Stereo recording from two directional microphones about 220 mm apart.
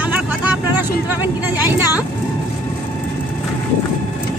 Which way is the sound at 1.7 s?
10° right (ahead or behind).